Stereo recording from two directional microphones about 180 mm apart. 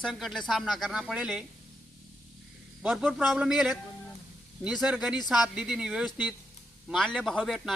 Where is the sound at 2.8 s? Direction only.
Centre (ahead or behind).